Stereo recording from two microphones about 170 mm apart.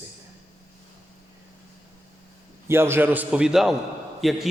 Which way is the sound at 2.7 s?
15° right (ahead or behind).